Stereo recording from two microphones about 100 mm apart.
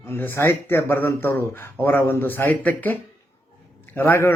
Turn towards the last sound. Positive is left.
turn(degrees=25)  # may be behind; listen again after turning